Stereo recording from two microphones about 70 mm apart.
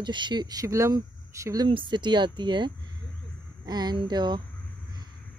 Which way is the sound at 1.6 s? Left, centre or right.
Right.